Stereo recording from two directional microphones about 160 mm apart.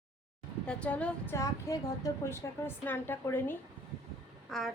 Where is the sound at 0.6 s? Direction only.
5° left (ahead or behind).